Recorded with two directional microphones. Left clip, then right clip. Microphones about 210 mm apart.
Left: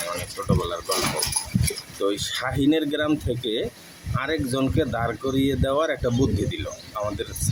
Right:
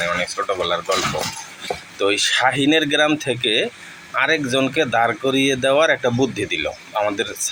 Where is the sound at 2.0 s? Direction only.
15° left (ahead or behind).